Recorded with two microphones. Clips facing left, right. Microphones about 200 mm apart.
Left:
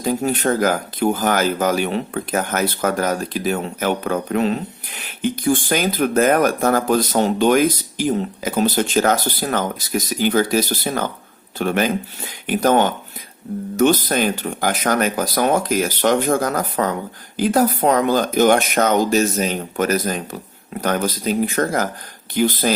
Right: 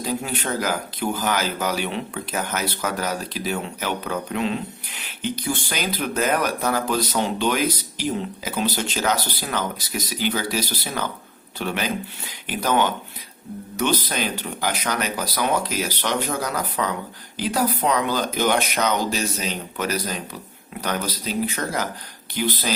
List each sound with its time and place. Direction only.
0.0 s speech: 50° left (ahead or behind)